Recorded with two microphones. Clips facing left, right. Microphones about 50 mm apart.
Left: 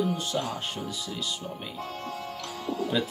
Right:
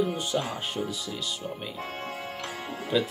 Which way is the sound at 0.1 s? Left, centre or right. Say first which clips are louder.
Right 1 dB; centre.